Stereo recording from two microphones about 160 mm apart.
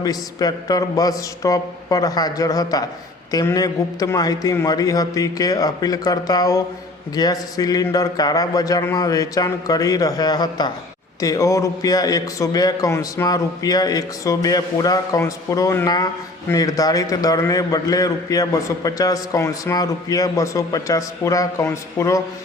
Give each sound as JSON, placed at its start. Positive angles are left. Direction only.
{"t": 0.0, "sound": "a man's voice", "side_deg": 25}